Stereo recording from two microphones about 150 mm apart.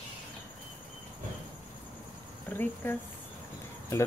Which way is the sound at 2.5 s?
15° left (ahead or behind).